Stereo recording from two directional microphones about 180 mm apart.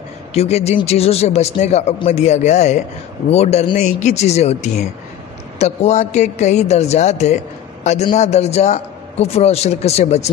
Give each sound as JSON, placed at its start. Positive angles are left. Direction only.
{"t": 0.3, "sound": "a man's voice", "side_deg": 35}